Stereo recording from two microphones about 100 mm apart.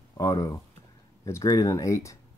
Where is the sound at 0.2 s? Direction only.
35° left (ahead or behind).